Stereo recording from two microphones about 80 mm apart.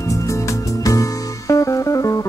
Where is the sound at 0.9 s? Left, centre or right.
Left.